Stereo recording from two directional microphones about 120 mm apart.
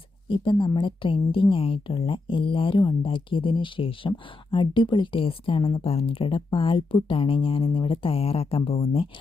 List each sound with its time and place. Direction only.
0.3 s speech: 45° left (ahead or behind)